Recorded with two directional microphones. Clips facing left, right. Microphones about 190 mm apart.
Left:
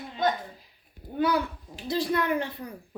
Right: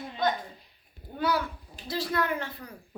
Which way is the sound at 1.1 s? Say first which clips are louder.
Left 3 dB; 20° left (ahead or behind).